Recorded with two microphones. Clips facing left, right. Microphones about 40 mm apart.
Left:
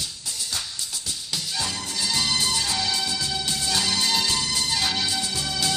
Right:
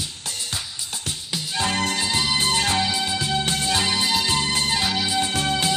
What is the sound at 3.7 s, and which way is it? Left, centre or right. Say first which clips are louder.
Music: right 1 dB; right.